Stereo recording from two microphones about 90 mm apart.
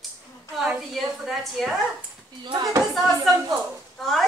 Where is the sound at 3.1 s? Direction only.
40° right (ahead or behind).